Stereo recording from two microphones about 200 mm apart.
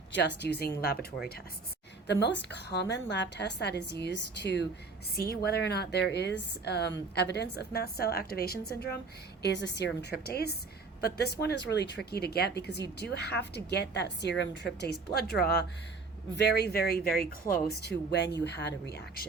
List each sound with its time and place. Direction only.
0.1 s a woman's voice: 60° left (ahead or behind)
2.2 s a woman's voice: 60° left (ahead or behind)